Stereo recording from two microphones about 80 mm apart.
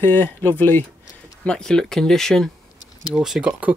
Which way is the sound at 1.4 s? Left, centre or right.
Centre.